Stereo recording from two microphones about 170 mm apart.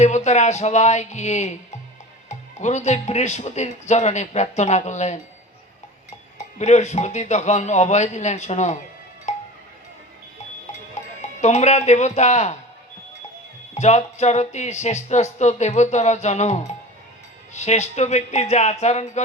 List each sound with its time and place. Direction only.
0.0 s speech: 40° left (ahead or behind)
6.6 s speech: 40° left (ahead or behind)
9.3 s music: 40° left (ahead or behind)
11.2 s speech: 40° left (ahead or behind)
13.7 s speech: 40° left (ahead or behind)